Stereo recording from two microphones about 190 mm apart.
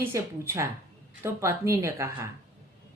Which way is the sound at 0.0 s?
15° right (ahead or behind).